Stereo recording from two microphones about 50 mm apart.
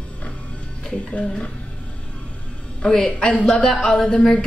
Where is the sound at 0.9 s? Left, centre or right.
Left.